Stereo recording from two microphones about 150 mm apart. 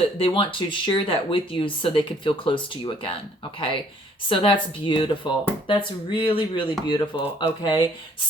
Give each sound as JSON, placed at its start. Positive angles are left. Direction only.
{"t": 0.2, "sound": "speech", "side_deg": 35}
{"t": 4.3, "sound": "speech", "side_deg": 35}